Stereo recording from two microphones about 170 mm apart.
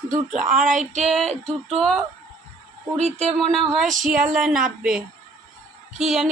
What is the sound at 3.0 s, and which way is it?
Speech, 40° right (ahead or behind).